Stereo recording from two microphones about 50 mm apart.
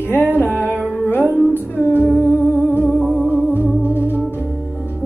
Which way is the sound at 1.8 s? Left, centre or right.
Left.